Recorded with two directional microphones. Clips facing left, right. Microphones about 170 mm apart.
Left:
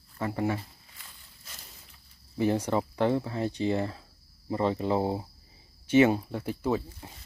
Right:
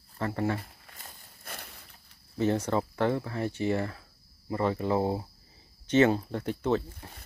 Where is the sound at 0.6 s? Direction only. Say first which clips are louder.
Right 1 dB; 50° right (ahead or behind); by 1.9 s 65° right (ahead or behind).